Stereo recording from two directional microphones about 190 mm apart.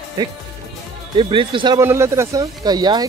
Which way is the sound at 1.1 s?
25° right (ahead or behind).